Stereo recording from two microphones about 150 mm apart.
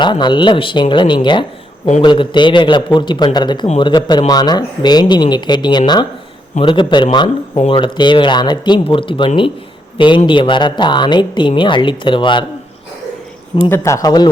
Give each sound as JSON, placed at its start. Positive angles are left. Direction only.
{"t": 0.0, "sound": "speech", "side_deg": 30}
{"t": 13.7, "sound": "speech", "side_deg": 15}